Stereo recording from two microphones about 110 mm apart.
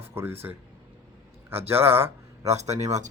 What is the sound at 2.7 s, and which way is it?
Speech, 90° right.